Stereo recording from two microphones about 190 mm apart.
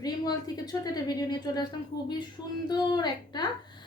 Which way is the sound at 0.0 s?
20° left (ahead or behind).